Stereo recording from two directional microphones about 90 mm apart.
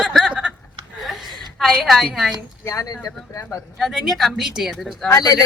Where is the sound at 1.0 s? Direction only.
Centre (ahead or behind).